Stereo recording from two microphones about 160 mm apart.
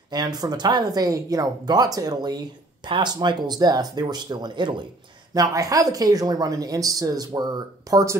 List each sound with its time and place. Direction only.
0.1 s speech: 25° right (ahead or behind)